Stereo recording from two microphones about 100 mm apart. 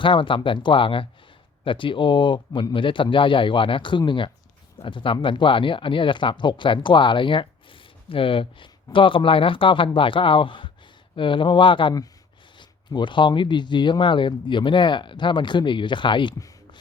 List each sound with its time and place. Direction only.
0.0 s speech: 55° left (ahead or behind)